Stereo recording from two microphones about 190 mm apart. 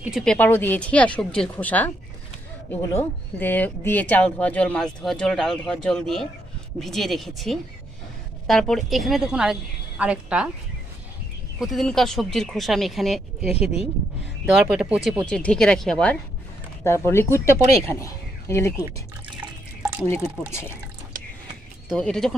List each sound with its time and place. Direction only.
0.0 s speech: centre (ahead or behind)
11.6 s speech: centre (ahead or behind)
18.8 s speech: 10° right (ahead or behind)
19.8 s drip: 10° right (ahead or behind)
21.8 s speech: 5° left (ahead or behind)